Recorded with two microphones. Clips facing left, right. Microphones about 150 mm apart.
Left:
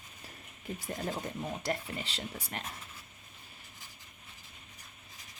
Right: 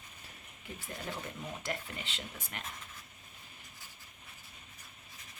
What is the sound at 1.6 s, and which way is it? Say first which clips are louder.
Speech: left 3 dB; 35° left (ahead or behind).